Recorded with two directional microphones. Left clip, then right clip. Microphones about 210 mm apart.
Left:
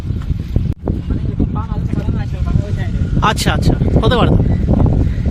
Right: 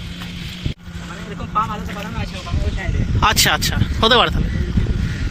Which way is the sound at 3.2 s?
5° left (ahead or behind).